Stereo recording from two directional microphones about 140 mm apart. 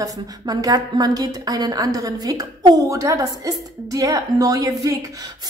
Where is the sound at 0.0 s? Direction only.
25° right (ahead or behind).